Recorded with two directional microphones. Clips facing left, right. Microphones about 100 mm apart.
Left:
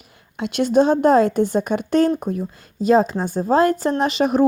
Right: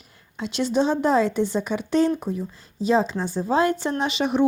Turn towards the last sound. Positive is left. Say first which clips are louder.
# left 5 dB
turn(degrees=40)  # may be behind; listen again after turning